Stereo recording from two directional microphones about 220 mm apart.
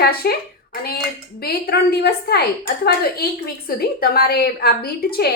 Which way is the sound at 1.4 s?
45° left (ahead or behind).